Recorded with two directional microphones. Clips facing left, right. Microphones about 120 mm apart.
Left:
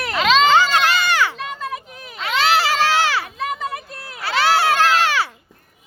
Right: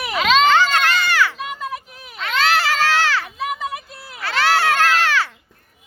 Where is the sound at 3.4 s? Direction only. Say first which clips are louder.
Even; 5° right (ahead or behind).